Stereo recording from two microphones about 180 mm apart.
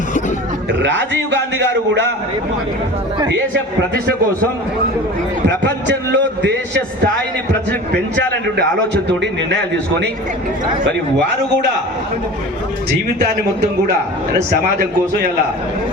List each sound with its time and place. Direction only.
0.7 s a man's voice: 80° right
3.9 s a man's voice: 55° right (ahead or behind)
5.5 s a man's voice: 80° right
13.1 s a man's voice: 60° right (ahead or behind)